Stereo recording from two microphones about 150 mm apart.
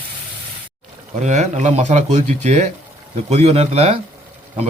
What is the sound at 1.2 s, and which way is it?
Speech, 50° right (ahead or behind).